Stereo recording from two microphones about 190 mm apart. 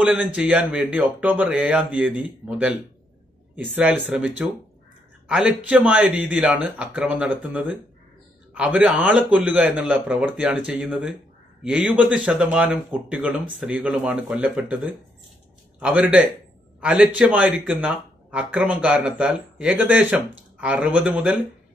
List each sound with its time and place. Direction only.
0.0 s speech: 5° right (ahead or behind)
3.5 s a man's voice: 5° right (ahead or behind)